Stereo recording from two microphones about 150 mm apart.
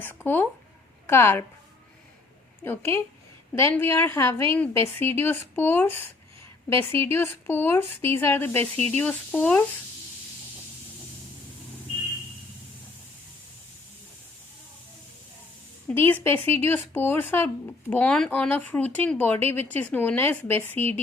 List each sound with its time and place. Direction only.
0.0 s speech: 15° left (ahead or behind)
2.6 s speech: 15° left (ahead or behind)
15.9 s speech: 10° left (ahead or behind)